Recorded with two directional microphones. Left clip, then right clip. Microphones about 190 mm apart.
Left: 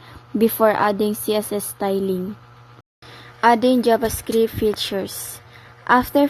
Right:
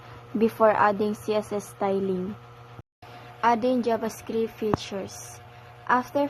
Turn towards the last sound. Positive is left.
turn(degrees=50)  # may be behind; listen again after turning